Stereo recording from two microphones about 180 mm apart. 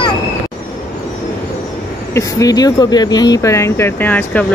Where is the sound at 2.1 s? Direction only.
20° left (ahead or behind).